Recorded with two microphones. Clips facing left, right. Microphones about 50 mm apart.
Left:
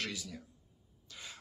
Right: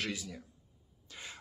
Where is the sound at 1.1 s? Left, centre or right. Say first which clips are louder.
Right 2 dB; right.